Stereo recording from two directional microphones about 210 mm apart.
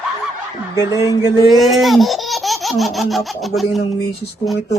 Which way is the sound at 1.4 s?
Centre (ahead or behind).